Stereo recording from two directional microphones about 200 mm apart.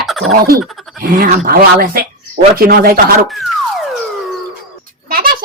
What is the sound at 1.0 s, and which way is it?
A man's voice, 45° right (ahead or behind).